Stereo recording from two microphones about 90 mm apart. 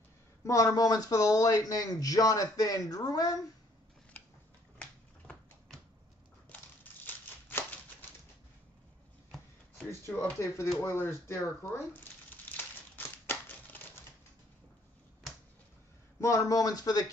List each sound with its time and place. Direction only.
0.5 s a man's voice: 40° left (ahead or behind)
4.7 s finger snapping: 10° left (ahead or behind)
6.5 s a sound: 20° left (ahead or behind)
10.4 s speech: 30° left (ahead or behind)
11.7 s crumpling: 25° left (ahead or behind)
16.2 s a man's voice: 40° left (ahead or behind)